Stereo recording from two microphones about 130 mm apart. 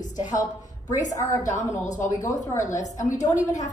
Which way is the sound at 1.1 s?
25° left (ahead or behind).